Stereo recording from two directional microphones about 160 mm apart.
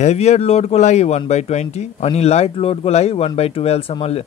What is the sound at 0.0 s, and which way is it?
Speech, 40° left (ahead or behind).